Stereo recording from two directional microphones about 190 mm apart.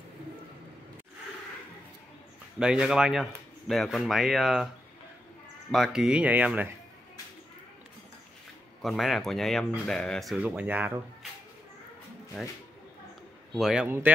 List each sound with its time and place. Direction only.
2.6 s speech: 5° right (ahead or behind)
5.7 s speech: centre (ahead or behind)
8.8 s speech: centre (ahead or behind)
13.6 s a man's voice: 5° right (ahead or behind)